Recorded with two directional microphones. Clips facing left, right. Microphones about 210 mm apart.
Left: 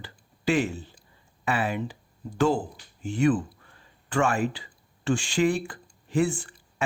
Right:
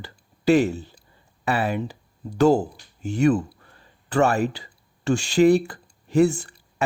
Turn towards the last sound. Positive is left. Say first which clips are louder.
# right 6 dB
turn(degrees=-40)  # may be behind; listen again after turning